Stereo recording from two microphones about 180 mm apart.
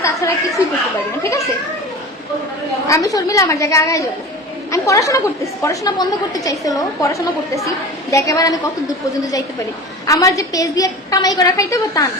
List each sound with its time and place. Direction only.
0.0 s a sound: 20° left (ahead or behind)
1.2 s a woman's voice: 15° left (ahead or behind)
2.8 s a woman's voice: 20° left (ahead or behind)
10.1 s a woman's voice: 20° left (ahead or behind)